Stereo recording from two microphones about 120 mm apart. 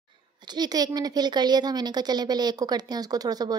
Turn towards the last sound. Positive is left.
turn(degrees=-35)  # may be behind; listen again after turning